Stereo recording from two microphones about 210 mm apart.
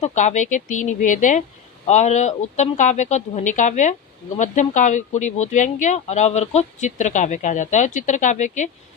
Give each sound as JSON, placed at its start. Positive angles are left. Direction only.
{"t": 0.0, "sound": "speech", "side_deg": 35}